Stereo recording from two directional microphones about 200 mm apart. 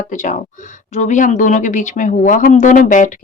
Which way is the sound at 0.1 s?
40° left (ahead or behind).